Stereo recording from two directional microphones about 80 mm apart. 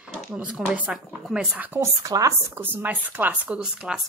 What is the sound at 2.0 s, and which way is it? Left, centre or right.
Speech, right.